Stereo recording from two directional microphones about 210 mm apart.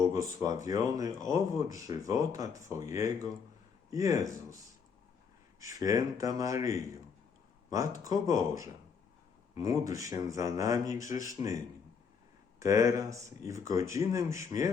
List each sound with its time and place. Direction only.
0.4 s speech: 15° right (ahead or behind)
5.5 s speech: 15° right (ahead or behind)
8.0 s speech: 15° right (ahead or behind)